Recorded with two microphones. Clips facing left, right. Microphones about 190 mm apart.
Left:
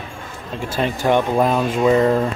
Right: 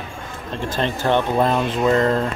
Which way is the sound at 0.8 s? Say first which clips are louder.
Left 2 dB; 10° left (ahead or behind).